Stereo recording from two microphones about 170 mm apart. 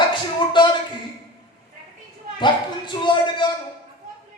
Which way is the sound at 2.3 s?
30° left (ahead or behind).